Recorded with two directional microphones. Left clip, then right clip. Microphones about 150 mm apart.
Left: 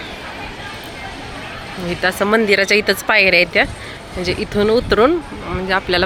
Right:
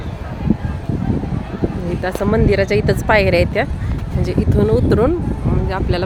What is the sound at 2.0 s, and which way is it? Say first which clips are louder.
Speech: left 3 dB; 15° right (ahead or behind).